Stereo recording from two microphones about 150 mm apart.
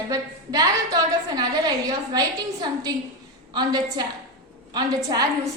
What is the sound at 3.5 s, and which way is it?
A woman's voice, 25° right (ahead or behind).